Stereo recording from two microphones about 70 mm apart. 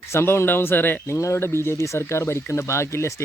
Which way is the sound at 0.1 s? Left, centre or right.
Left.